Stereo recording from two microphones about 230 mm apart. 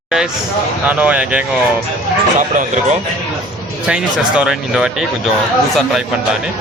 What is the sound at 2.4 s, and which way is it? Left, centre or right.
Speech, right.